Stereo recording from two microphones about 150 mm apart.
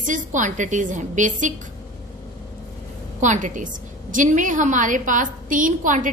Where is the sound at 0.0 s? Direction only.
60° right (ahead or behind).